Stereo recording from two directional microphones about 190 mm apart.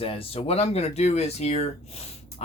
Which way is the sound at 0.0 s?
30° left (ahead or behind).